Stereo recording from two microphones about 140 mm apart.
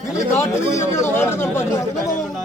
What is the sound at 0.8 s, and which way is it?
Speech, 20° left (ahead or behind).